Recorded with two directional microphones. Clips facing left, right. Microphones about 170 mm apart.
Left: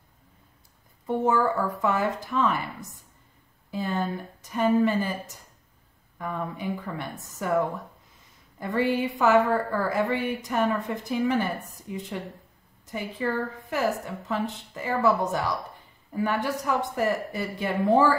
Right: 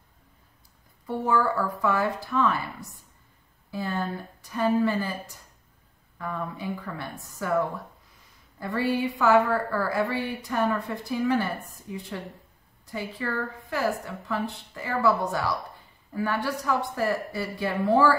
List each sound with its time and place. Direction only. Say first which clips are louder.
1.0 s a woman's voice: left 2 dB; 20° left (ahead or behind)